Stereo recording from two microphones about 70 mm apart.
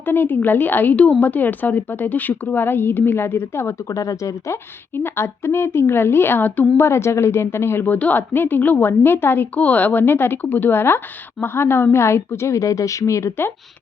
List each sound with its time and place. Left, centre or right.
0.0 s a woman's voice: left
3.8 s a woman's voice: left
7.9 s a woman's voice: left